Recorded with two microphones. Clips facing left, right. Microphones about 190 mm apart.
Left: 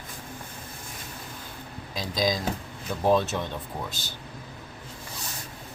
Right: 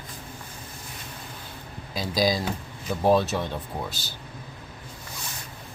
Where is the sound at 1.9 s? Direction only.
5° right (ahead or behind).